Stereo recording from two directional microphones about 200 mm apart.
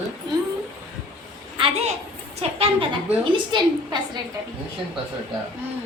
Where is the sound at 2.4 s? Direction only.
30° right (ahead or behind).